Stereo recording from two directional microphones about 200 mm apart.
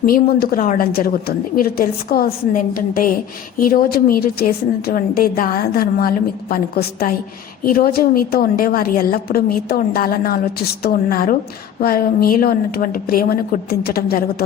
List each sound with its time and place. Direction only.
0.0 s a woman's voice: 50° left (ahead or behind)